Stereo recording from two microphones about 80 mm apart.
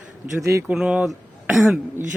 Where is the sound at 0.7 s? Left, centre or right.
Centre.